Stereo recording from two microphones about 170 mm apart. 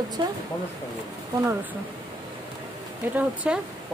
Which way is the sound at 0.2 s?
25° right (ahead or behind).